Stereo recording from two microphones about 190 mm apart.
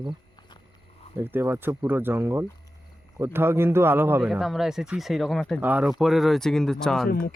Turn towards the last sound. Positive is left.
turn(degrees=50)  # may be behind; listen again after turning